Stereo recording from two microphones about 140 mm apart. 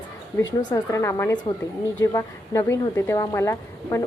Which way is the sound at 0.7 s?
20° left (ahead or behind).